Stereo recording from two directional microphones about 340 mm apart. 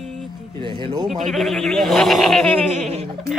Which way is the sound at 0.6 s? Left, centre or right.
Centre.